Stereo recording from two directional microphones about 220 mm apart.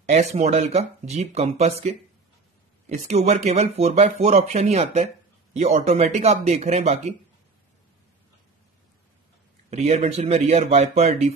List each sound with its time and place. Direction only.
0.1 s speech: 30° right (ahead or behind)
9.7 s speech: 30° right (ahead or behind)